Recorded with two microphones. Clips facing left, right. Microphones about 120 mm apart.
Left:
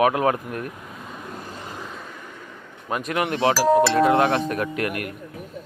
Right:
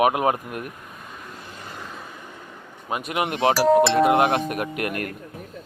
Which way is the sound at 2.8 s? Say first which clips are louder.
Left 1 dB; 10° right (ahead or behind).